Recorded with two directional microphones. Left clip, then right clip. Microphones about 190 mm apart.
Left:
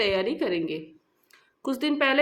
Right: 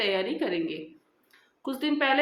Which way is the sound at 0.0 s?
35° left (ahead or behind).